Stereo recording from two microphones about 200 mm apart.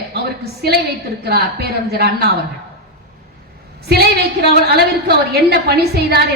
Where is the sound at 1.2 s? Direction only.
50° right (ahead or behind).